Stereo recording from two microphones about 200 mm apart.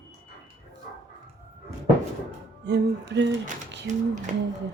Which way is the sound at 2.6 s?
60° right (ahead or behind).